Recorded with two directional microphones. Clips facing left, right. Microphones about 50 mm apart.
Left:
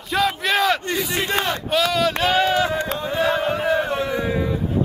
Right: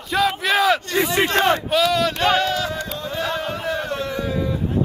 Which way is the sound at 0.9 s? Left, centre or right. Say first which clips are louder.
Right 4 dB; right.